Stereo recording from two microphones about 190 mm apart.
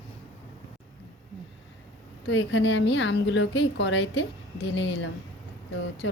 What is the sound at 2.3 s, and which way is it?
A woman's voice, 75° left (ahead or behind).